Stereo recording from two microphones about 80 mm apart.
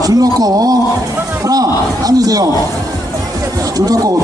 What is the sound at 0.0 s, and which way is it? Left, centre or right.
Speech, right.